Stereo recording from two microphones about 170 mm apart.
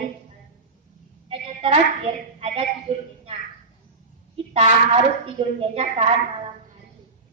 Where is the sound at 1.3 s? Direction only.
35° right (ahead or behind).